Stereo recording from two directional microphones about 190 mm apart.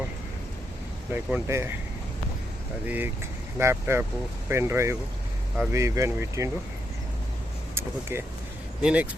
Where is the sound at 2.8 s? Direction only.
10° right (ahead or behind).